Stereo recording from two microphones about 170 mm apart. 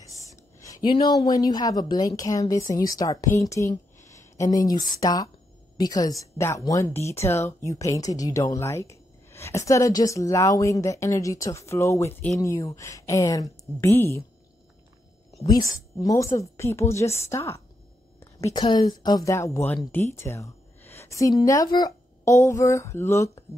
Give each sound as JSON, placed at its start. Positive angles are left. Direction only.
{"t": 0.0, "sound": "a woman's voice", "side_deg": 20}
{"t": 15.4, "sound": "a woman's voice", "side_deg": 20}